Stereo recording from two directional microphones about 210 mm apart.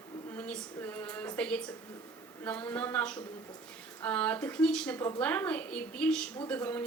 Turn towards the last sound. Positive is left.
turn(degrees=10)  # may be behind; listen again after turning